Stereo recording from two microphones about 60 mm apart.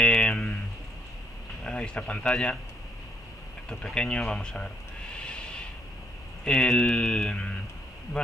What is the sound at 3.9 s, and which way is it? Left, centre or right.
Speech, centre.